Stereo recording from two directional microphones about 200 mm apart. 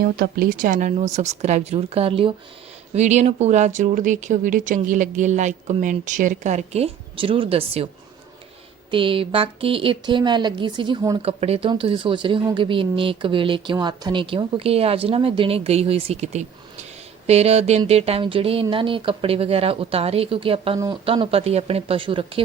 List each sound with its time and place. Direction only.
0.0 s speech: 50° right (ahead or behind); by 7.9 s 30° right (ahead or behind)
8.9 s speech: 25° right (ahead or behind)
11.2 s speech: 30° right (ahead or behind)
20.7 s speech: 15° right (ahead or behind)
21.0 s speech: 25° right (ahead or behind)